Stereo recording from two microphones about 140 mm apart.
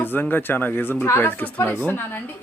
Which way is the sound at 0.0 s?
15° left (ahead or behind).